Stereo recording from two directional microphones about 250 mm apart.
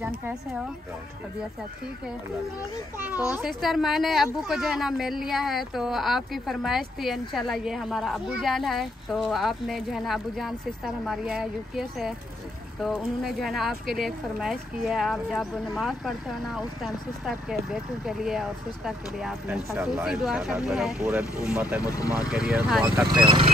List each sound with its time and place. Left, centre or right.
3.3 s speech: centre
21.8 s speech: centre
22.3 s speech: centre
23.0 s speech: centre